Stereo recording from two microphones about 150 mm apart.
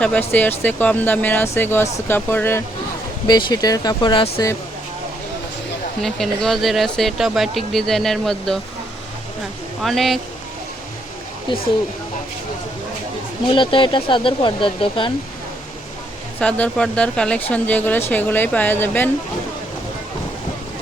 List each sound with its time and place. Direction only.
0.0 s speech: 10° left (ahead or behind)
3.2 s speech: 25° left (ahead or behind)
6.0 s speech: centre (ahead or behind)
9.8 s speech: centre (ahead or behind)
13.5 s speech: 35° left (ahead or behind)
16.4 s speech: 10° left (ahead or behind)